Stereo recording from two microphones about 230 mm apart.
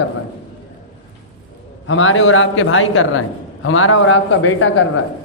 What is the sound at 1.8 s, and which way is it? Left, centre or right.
A man's voice, left.